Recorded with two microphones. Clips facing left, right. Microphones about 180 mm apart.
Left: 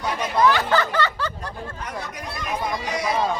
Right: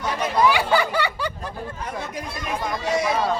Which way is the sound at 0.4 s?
10° right (ahead or behind).